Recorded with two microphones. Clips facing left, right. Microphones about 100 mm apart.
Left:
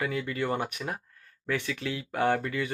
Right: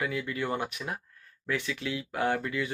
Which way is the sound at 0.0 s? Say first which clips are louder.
Left 1 dB; 40° left (ahead or behind).